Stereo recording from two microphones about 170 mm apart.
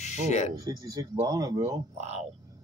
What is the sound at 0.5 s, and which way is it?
Speech, 20° right (ahead or behind).